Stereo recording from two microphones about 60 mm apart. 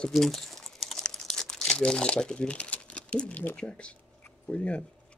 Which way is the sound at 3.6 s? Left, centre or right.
Left.